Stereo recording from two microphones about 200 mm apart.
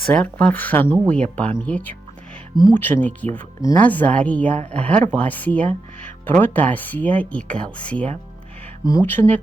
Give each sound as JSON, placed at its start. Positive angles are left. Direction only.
{"t": 0.0, "sound": "speech", "side_deg": 5}